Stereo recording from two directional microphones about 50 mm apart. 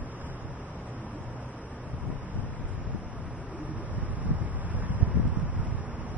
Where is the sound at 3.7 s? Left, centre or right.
Right.